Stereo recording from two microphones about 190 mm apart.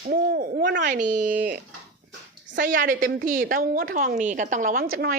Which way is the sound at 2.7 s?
45° right (ahead or behind).